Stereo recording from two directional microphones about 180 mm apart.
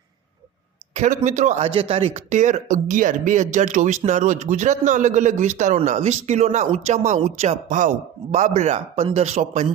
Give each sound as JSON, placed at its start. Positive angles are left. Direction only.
{"t": 0.9, "sound": "speech", "side_deg": -40}